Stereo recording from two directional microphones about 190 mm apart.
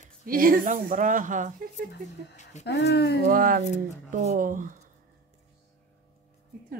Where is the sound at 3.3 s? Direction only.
45° right (ahead or behind).